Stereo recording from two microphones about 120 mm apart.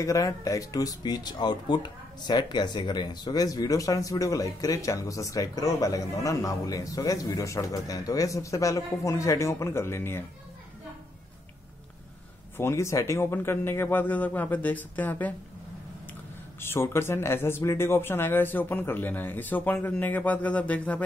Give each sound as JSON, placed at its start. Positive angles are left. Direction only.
{"t": 0.0, "sound": "speech", "side_deg": 25}
{"t": 12.5, "sound": "speech", "side_deg": 25}
{"t": 16.5, "sound": "speech", "side_deg": 20}